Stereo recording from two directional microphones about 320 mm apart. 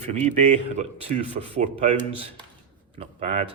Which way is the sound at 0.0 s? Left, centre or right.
Right.